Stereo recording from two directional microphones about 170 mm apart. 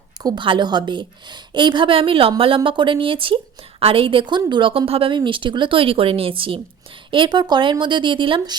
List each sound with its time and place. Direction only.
0.2 s a woman's voice: 25° right (ahead or behind)